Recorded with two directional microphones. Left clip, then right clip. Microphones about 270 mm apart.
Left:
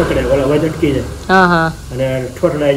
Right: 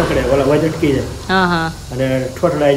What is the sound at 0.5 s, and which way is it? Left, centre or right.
Speech, centre.